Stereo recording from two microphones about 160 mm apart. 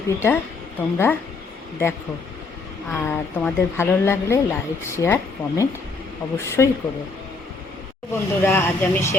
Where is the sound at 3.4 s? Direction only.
15° left (ahead or behind).